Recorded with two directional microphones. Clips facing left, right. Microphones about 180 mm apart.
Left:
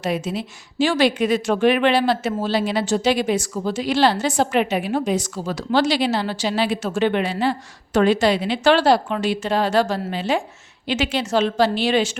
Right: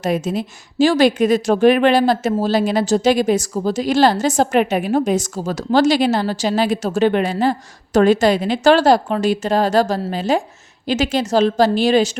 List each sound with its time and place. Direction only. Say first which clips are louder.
0.0 s a woman's voice: right 4 dB; 45° right (ahead or behind)